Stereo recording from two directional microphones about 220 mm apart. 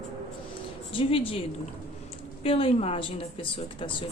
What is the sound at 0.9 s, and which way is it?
Speech, 25° left (ahead or behind).